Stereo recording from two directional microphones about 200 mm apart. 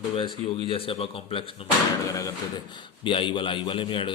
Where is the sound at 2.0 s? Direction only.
15° left (ahead or behind).